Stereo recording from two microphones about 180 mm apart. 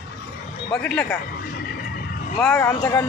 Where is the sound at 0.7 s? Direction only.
5° left (ahead or behind).